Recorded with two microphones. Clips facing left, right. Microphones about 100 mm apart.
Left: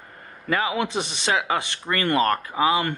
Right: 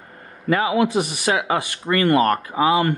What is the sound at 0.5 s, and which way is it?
Speech, 35° right (ahead or behind).